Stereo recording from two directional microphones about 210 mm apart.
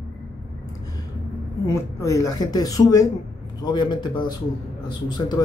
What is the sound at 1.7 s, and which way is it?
Speech, 15° left (ahead or behind).